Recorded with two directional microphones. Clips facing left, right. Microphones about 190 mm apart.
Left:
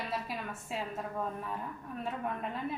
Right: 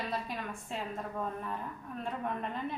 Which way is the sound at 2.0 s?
5° left (ahead or behind).